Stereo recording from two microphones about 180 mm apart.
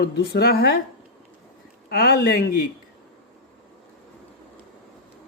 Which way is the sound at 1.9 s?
55° left (ahead or behind).